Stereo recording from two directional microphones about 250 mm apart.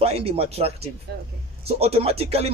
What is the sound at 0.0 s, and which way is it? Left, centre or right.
Speech, right.